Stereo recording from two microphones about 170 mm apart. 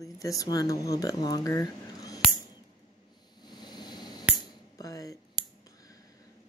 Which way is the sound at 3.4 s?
25° left (ahead or behind).